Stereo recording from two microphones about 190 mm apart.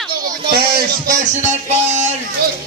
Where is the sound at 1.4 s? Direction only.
40° right (ahead or behind).